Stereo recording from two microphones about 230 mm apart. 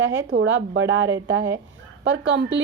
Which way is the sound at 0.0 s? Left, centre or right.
Right.